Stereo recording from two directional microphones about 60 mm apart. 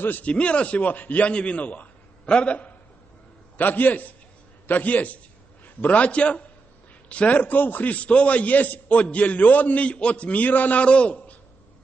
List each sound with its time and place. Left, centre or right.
0.0 s a man's voice: left
0.3 s a man's voice: left